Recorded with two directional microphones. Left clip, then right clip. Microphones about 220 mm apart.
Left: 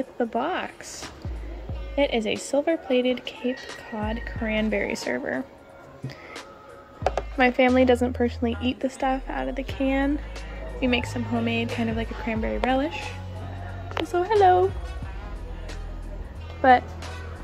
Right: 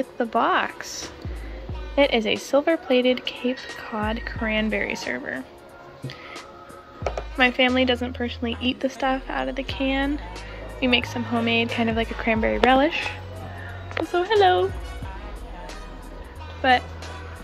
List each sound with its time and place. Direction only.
0.2 s speech: 10° left (ahead or behind)
2.0 s speech: 10° left (ahead or behind)
7.3 s speech: 15° left (ahead or behind)
14.1 s speech: 15° left (ahead or behind)